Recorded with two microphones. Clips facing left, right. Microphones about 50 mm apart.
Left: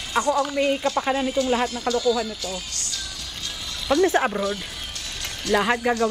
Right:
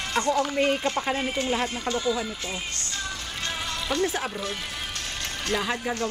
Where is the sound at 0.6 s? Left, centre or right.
Right.